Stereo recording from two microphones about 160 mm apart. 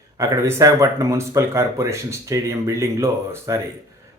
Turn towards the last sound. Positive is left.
turn(degrees=-20)  # may be behind; listen again after turning